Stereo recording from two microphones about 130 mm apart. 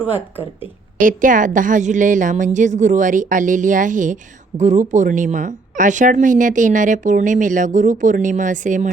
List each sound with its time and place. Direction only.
0.0 s speech: 15° right (ahead or behind)
0.9 s a woman's voice: 90° right